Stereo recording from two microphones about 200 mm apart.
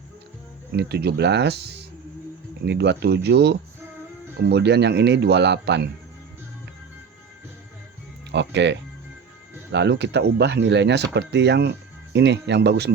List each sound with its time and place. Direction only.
0.7 s speech: 55° right (ahead or behind)
2.6 s speech: 55° right (ahead or behind)
8.3 s speech: 60° right (ahead or behind)